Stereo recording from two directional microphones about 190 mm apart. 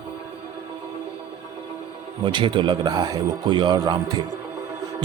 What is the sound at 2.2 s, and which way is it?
Speech, 25° right (ahead or behind).